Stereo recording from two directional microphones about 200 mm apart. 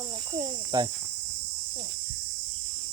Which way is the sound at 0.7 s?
20° right (ahead or behind).